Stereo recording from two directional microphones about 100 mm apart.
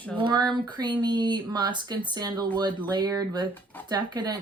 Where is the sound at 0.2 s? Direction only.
50° right (ahead or behind).